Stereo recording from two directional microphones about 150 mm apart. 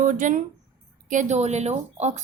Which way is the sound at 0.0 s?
60° right (ahead or behind).